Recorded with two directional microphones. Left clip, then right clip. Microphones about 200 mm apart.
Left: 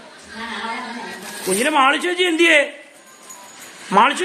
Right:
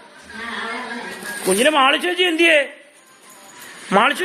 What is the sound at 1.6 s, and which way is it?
Speech, 10° right (ahead or behind).